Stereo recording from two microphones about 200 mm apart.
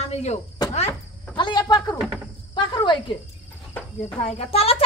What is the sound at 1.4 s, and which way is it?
Speech, 20° left (ahead or behind).